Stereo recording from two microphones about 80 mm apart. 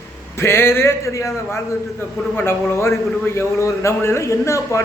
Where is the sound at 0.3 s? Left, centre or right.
Left.